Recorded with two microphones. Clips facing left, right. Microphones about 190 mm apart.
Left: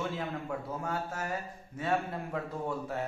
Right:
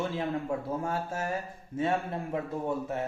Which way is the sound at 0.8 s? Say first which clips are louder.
Right 3 dB; 25° right (ahead or behind).